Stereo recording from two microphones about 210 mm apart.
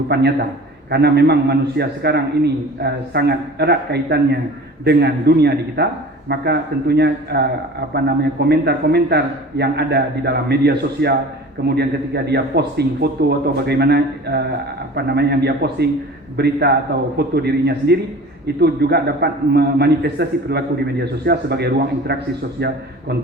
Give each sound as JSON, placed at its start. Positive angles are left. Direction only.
{"t": 0.1, "sound": "a man's voice", "side_deg": -50}